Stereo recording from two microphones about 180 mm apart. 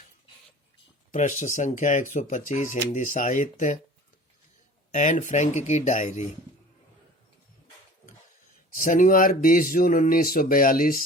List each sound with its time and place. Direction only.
1.1 s speech: 40° left (ahead or behind)
4.9 s speech: 40° left (ahead or behind)
8.7 s speech: 50° left (ahead or behind)